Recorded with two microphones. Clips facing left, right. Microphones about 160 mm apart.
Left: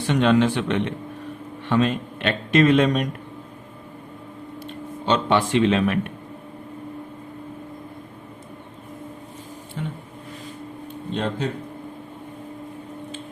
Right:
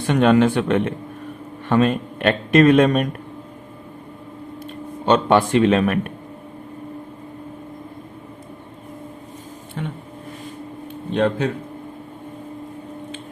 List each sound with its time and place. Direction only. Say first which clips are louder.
0.0 s a man's voice: right 3 dB; 50° right (ahead or behind)
4.6 s speech: right 5 dB; 50° right (ahead or behind)
11.1 s a man's voice: right 7 dB; 80° right